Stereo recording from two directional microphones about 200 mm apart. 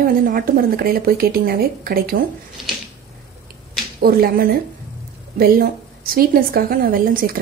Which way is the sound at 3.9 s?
50° right (ahead or behind).